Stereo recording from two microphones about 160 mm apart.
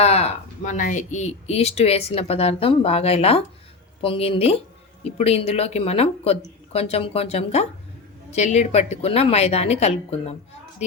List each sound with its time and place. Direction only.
0.0 s speech: 40° left (ahead or behind)